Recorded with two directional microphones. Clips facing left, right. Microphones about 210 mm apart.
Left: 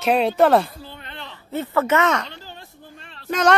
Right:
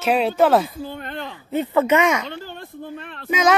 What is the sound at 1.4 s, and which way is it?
Speech, 15° right (ahead or behind).